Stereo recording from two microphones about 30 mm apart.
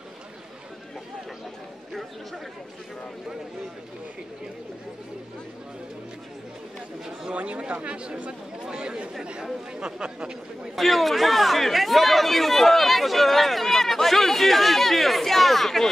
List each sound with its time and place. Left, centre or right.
1.9 s speech: centre
7.2 s speech: right
10.8 s speech: centre